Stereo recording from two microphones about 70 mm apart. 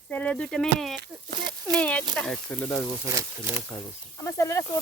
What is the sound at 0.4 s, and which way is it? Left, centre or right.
Speech, centre.